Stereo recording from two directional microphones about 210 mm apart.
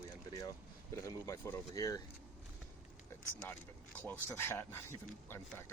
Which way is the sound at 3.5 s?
10° left (ahead or behind).